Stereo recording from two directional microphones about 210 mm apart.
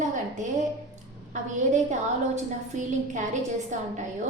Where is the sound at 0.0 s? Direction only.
35° right (ahead or behind).